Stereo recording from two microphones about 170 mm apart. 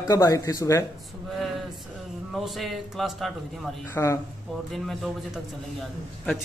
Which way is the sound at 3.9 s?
15° left (ahead or behind).